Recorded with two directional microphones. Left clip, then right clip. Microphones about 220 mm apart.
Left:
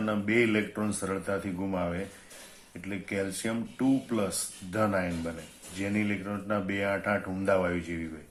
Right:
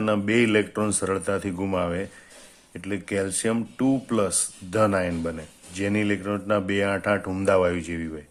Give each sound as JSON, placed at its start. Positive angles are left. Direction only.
{"t": 0.0, "sound": "speech", "side_deg": -45}